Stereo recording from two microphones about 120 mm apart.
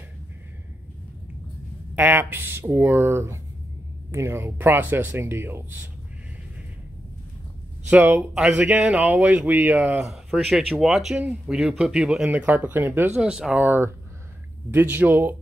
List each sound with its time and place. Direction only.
2.0 s speech: 15° right (ahead or behind)
7.9 s speech: 15° right (ahead or behind)
10.0 s speech: 5° right (ahead or behind)
13.2 s speech: 5° right (ahead or behind)